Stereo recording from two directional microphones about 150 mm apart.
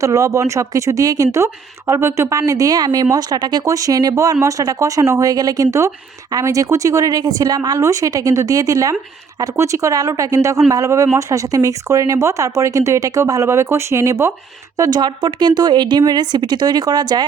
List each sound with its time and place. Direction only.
0.0 s speech: 20° right (ahead or behind)